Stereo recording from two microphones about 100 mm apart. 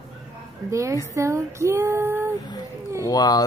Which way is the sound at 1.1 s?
30° right (ahead or behind).